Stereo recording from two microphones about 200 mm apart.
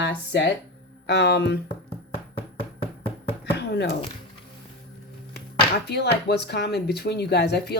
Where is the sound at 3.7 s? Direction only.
55° left (ahead or behind).